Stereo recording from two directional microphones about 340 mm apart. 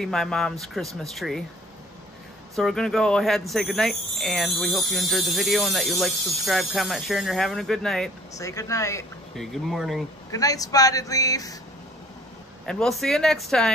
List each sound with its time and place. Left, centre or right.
0.0 s speech: centre
2.5 s speech: centre
10.3 s speech: centre
12.6 s speech: centre